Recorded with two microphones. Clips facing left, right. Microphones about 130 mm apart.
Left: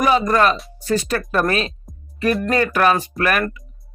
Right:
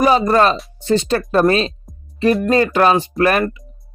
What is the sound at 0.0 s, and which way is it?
Speech, 30° right (ahead or behind).